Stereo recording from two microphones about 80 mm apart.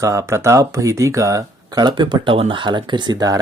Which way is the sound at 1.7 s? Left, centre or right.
Right.